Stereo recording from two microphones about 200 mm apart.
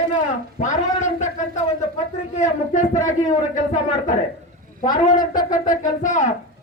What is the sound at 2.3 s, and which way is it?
A man's voice, 40° left (ahead or behind).